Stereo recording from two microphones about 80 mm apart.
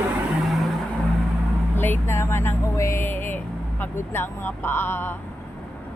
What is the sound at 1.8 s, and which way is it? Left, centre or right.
Speech, left.